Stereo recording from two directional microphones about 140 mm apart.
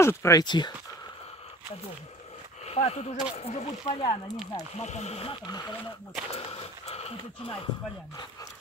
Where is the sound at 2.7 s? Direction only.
45° left (ahead or behind).